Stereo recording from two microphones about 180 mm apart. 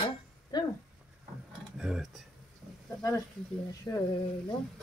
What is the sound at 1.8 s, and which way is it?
Speech, centre (ahead or behind).